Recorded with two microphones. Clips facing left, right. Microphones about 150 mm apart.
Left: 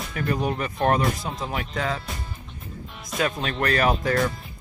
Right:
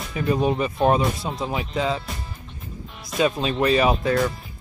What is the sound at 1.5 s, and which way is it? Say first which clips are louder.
Speech: right 4 dB; 15° right (ahead or behind).